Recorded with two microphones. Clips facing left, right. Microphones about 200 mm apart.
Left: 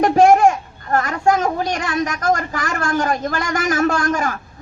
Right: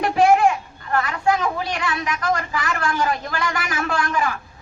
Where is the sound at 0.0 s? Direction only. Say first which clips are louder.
Left 4 dB; 45° left (ahead or behind).